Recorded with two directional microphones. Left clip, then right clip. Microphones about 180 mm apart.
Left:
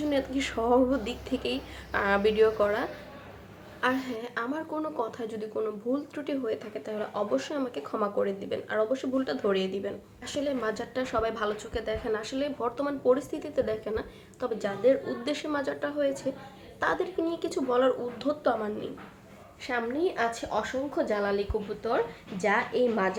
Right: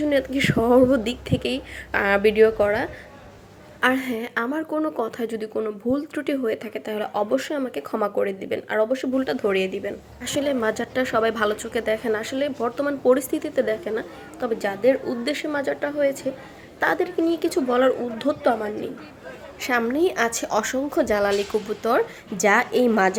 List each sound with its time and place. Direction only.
0.1 s speech: 40° right (ahead or behind)
3.8 s a woman's voice: 50° right (ahead or behind)
19.6 s a woman's voice: 65° right (ahead or behind)